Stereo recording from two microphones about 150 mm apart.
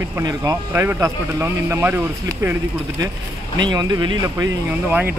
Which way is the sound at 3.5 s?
30° right (ahead or behind).